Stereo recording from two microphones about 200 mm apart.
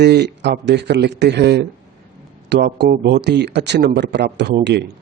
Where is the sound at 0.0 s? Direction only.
55° right (ahead or behind).